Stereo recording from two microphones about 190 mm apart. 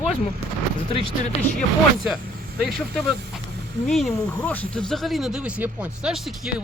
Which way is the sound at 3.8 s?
5° left (ahead or behind).